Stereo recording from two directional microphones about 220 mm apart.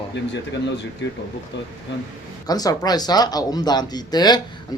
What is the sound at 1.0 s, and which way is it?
Speech, 55° left (ahead or behind).